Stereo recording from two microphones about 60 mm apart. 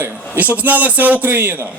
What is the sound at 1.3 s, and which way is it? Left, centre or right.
Speech, right.